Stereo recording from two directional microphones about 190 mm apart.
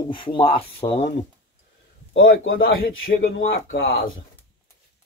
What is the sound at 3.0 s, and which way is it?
Speech, 55° left (ahead or behind).